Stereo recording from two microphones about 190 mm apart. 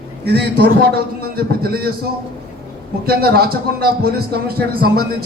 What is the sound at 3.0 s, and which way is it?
A man's voice, 55° right (ahead or behind).